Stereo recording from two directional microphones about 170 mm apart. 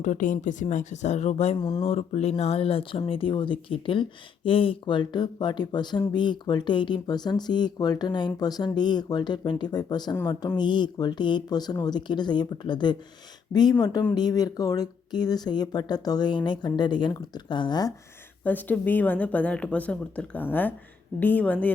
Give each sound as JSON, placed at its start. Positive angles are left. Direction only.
{"t": 0.0, "sound": "speech", "side_deg": 45}
{"t": 1.5, "sound": "speech", "side_deg": 20}
{"t": 1.8, "sound": "speech", "side_deg": 40}
{"t": 18.4, "sound": "speech", "side_deg": 10}